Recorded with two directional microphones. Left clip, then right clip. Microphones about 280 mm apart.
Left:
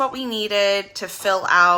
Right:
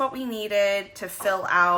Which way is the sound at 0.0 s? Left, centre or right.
Centre.